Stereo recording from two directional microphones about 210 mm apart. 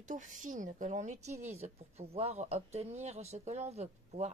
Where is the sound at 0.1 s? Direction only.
35° right (ahead or behind).